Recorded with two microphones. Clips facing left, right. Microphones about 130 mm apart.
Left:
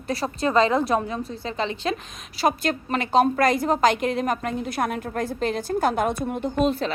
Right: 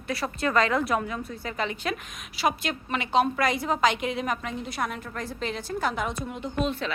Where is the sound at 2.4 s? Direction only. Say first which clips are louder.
Left 4 dB; 40° left (ahead or behind).